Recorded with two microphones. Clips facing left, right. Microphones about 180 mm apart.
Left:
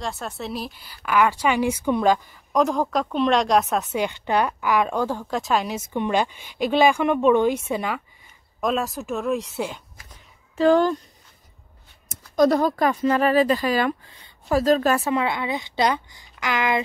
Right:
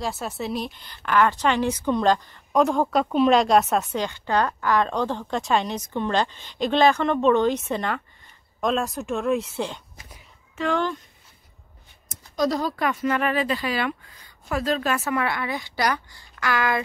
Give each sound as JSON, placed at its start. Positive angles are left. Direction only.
{"t": 0.0, "sound": "a woman's voice", "side_deg": 0}
{"t": 4.0, "sound": "a woman's voice", "side_deg": 15}
{"t": 10.6, "sound": "speech", "side_deg": 40}
{"t": 12.4, "sound": "speech", "side_deg": 55}
{"t": 12.7, "sound": "speech", "side_deg": 35}
{"t": 14.0, "sound": "a sound", "side_deg": 25}
{"t": 14.6, "sound": "speech", "side_deg": 40}
{"t": 15.0, "sound": "a woman's voice", "side_deg": 20}